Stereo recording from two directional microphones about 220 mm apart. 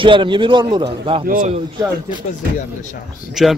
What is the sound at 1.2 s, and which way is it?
Speech, 40° right (ahead or behind).